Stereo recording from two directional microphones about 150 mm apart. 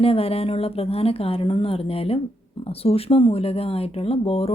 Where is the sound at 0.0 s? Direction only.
40° left (ahead or behind).